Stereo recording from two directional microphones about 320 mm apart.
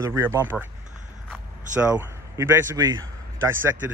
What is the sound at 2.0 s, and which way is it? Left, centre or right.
A man's voice, centre.